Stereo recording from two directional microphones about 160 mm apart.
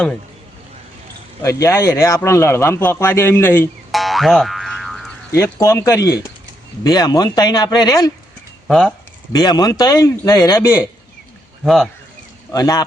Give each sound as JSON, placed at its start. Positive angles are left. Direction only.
{"t": 1.4, "sound": "speech", "side_deg": 20}
{"t": 3.9, "sound": "boing", "side_deg": 0}
{"t": 5.3, "sound": "speech", "side_deg": 15}
{"t": 8.6, "sound": "speech", "side_deg": 0}
{"t": 9.3, "sound": "speech", "side_deg": 25}
{"t": 11.6, "sound": "speech", "side_deg": 0}
{"t": 12.5, "sound": "speech", "side_deg": 20}